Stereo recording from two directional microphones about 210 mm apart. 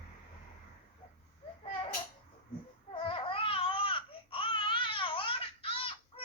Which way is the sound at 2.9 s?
25° left (ahead or behind).